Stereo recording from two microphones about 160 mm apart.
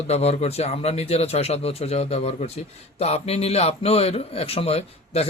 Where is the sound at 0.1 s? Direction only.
40° left (ahead or behind).